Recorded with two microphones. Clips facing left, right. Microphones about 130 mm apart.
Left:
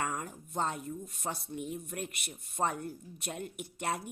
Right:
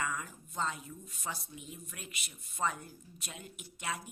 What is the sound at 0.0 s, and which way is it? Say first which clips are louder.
A woman's voice: left 2 dB; 50° left (ahead or behind).